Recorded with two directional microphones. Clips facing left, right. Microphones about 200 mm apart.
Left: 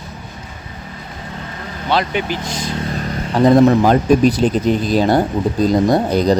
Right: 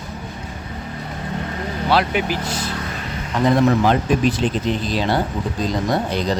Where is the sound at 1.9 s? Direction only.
5° right (ahead or behind).